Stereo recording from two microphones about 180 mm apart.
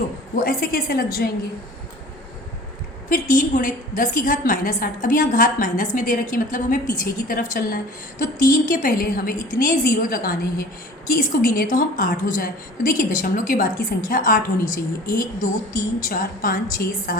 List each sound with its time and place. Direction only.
0.3 s a woman's voice: 55° left (ahead or behind)
3.1 s a woman's voice: 50° left (ahead or behind)